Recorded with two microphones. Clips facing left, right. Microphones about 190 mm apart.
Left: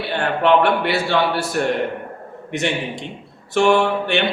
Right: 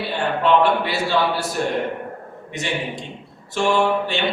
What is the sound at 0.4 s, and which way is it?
A man's voice, 65° left (ahead or behind).